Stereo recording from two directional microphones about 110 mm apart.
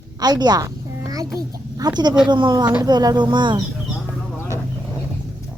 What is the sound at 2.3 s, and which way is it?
A child's voice, 45° right (ahead or behind).